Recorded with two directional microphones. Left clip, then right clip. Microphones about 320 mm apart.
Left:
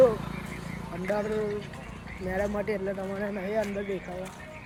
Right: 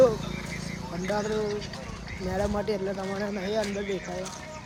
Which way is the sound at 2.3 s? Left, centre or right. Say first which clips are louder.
Right 1 dB; centre.